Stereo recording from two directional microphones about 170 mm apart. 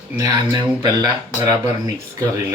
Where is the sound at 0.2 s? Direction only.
25° right (ahead or behind).